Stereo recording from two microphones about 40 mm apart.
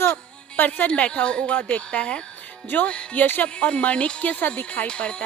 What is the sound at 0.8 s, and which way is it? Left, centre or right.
Speech, left.